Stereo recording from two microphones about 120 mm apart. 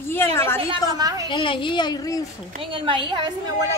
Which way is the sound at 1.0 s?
30° right (ahead or behind).